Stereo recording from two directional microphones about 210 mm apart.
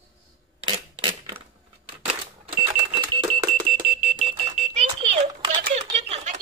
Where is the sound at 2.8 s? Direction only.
20° right (ahead or behind).